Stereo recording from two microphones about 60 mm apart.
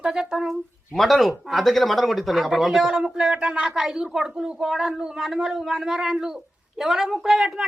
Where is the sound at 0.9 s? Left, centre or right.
Centre.